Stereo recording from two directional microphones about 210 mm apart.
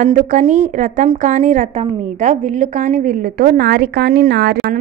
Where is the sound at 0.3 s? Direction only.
35° right (ahead or behind).